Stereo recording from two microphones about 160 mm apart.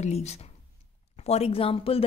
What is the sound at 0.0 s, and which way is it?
A woman's voice, 45° left (ahead or behind).